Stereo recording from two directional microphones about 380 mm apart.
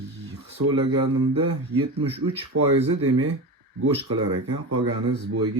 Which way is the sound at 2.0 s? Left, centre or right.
Centre.